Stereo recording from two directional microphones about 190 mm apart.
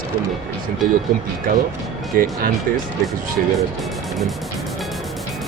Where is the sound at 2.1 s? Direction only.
50° right (ahead or behind).